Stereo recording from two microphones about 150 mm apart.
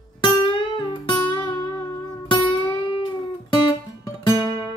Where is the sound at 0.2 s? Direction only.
35° left (ahead or behind).